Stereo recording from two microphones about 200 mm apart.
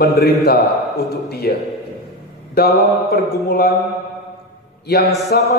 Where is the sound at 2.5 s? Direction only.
50° left (ahead or behind).